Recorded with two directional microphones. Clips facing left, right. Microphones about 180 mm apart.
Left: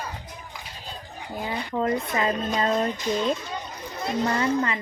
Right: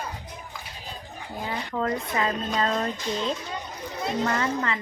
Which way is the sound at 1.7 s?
20° left (ahead or behind).